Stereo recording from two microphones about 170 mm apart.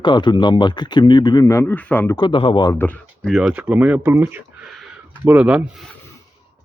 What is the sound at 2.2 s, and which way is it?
Speech, 30° left (ahead or behind).